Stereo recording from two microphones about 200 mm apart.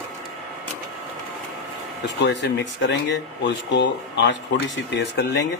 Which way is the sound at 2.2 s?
60° left (ahead or behind).